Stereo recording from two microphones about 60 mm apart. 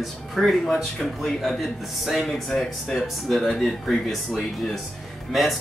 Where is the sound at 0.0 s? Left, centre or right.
Centre.